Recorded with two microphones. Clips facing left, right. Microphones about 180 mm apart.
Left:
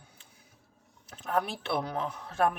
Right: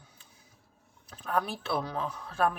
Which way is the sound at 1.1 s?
25° left (ahead or behind).